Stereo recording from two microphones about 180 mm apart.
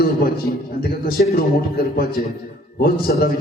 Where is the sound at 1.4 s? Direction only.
55° left (ahead or behind).